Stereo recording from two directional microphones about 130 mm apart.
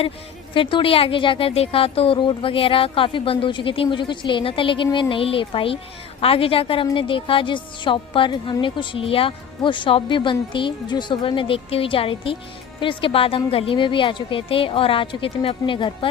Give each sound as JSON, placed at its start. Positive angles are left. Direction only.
{"t": 0.5, "sound": "speech", "side_deg": 40}